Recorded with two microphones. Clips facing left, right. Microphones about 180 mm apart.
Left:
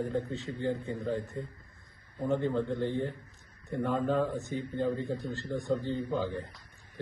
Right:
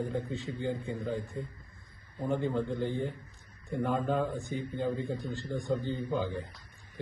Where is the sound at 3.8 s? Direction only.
Centre (ahead or behind).